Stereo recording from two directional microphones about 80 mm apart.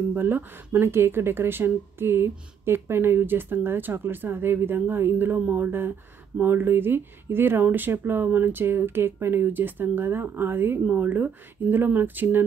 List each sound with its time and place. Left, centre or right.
0.1 s speech: right